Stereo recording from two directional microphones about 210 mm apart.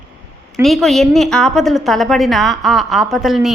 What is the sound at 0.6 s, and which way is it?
A woman's voice, centre (ahead or behind).